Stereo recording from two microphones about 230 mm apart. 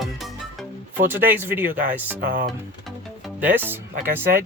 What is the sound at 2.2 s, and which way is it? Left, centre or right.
Speech, right.